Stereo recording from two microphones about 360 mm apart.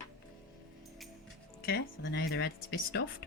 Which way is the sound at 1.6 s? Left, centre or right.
Left.